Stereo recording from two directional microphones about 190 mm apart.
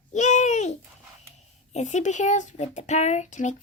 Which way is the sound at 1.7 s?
40° left (ahead or behind).